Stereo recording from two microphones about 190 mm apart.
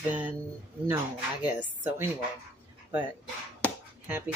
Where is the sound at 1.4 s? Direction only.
10° right (ahead or behind).